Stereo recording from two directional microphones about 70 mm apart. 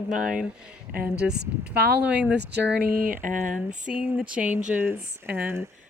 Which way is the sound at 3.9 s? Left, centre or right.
Centre.